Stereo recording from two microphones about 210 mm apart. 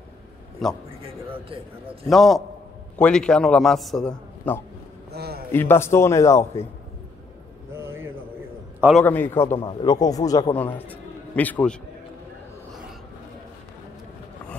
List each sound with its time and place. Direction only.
0.6 s a man's voice: centre (ahead or behind)
1.0 s a man's voice: 25° right (ahead or behind)
2.0 s a man's voice: centre (ahead or behind)
5.1 s a sound: 50° right (ahead or behind)
5.5 s a man's voice: 10° left (ahead or behind)
7.7 s a sound: 10° right (ahead or behind)
9.0 s a man's voice: 10° left (ahead or behind)
9.6 s a man's voice: 25° left (ahead or behind); by 11.7 s 10° left (ahead or behind)